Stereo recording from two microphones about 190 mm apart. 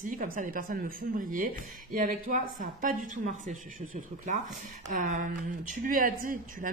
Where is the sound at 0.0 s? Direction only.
45° right (ahead or behind).